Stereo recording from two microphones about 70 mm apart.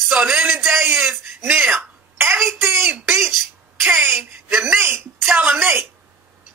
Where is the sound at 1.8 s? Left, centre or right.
Right.